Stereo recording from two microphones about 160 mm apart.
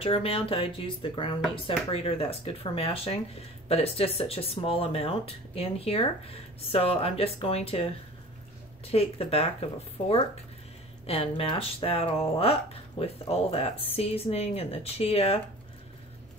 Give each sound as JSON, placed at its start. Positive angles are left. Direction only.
{"t": 0.0, "sound": "speech", "side_deg": 35}
{"t": 8.8, "sound": "speech", "side_deg": 40}